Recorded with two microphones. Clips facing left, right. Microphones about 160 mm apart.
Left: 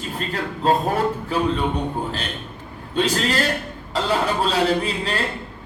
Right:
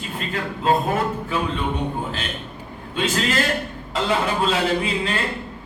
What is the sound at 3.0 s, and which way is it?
A man's voice, 40° left (ahead or behind).